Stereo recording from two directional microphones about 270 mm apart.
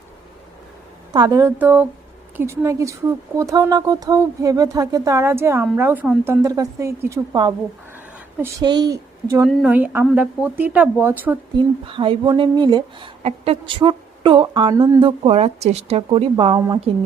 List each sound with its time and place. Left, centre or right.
1.1 s speech: centre
11.9 s a woman's voice: centre